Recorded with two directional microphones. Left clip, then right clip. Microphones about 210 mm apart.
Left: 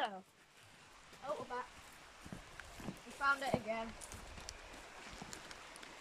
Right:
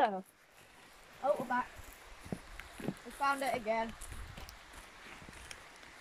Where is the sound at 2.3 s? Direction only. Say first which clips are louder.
Right 10 dB; 25° right (ahead or behind).